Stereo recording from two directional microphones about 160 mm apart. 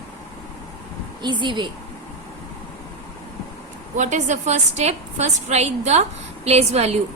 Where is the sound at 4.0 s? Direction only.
50° right (ahead or behind).